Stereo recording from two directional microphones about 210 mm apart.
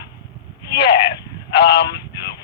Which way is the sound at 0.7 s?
55° left (ahead or behind).